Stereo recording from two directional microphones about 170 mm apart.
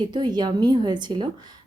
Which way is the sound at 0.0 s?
25° right (ahead or behind).